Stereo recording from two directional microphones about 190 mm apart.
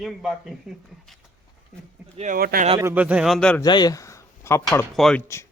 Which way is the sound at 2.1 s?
45° right (ahead or behind).